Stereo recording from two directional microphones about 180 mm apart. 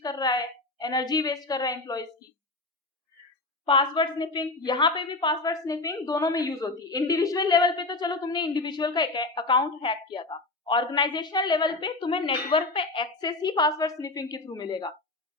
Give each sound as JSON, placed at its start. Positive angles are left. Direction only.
{"t": 0.0, "sound": "a woman's voice", "side_deg": 20}
{"t": 3.7, "sound": "a woman's voice", "side_deg": 25}